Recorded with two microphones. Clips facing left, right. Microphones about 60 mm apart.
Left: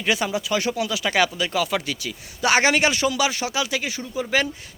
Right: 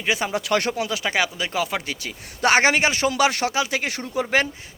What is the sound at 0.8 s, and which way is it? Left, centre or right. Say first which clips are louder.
Speech: left 2 dB; right.